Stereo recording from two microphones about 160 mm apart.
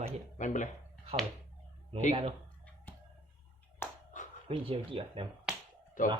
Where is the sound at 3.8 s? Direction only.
15° left (ahead or behind).